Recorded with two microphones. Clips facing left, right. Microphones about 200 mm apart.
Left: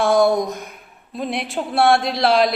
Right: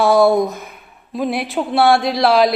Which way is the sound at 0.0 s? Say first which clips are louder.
Right 3 dB; 5° right (ahead or behind).